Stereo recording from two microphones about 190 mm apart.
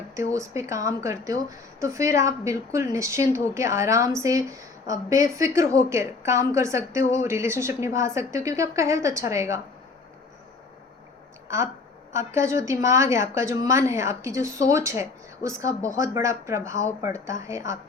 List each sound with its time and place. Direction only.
0.3 s a woman's voice: 15° right (ahead or behind)
12.1 s a woman's voice: 15° right (ahead or behind)